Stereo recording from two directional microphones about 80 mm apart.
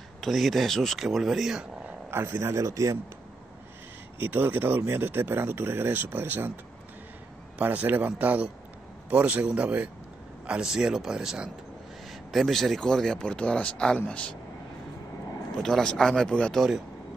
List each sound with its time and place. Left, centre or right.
0.2 s speech: centre
2.0 s speech: right
2.5 s speech: right
4.2 s a man's voice: right; by 14.3 s centre
15.5 s speech: centre
16.5 s speech: centre